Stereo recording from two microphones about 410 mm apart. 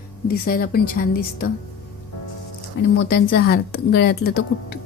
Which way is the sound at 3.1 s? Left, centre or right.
Left.